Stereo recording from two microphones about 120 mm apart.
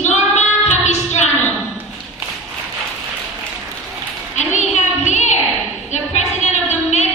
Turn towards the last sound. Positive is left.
turn(degrees=70)  # may be behind; listen again after turning